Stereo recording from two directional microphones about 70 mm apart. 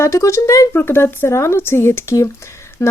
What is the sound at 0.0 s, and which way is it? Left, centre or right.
Speech, left.